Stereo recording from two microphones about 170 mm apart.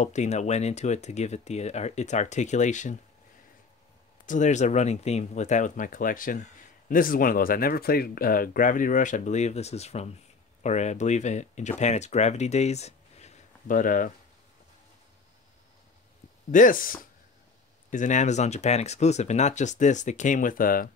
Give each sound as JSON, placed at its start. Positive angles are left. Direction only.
{"t": 0.0, "sound": "speech", "side_deg": 45}
{"t": 4.3, "sound": "speech", "side_deg": 45}
{"t": 16.5, "sound": "speech", "side_deg": 50}